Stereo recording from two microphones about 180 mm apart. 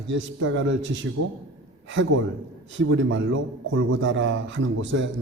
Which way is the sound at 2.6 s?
90° right.